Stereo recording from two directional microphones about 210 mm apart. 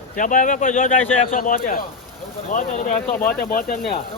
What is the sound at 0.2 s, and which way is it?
Speech, 40° left (ahead or behind).